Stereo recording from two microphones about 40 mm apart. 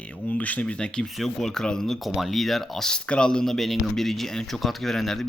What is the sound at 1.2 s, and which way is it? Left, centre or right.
Speech, centre.